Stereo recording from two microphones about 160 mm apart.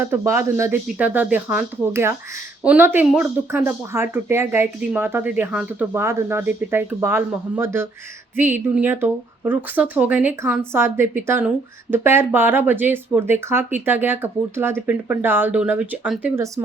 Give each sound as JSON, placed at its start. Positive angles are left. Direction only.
{"t": 0.0, "sound": "speech", "side_deg": -15}